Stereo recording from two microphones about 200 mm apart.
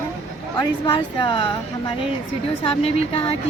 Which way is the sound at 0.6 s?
20° left (ahead or behind).